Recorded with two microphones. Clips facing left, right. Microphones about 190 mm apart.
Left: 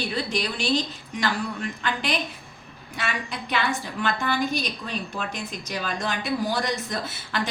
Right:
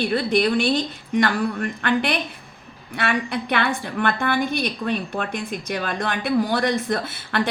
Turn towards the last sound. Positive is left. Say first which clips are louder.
# right 5 dB
turn(degrees=-60)  # may be behind; listen again after turning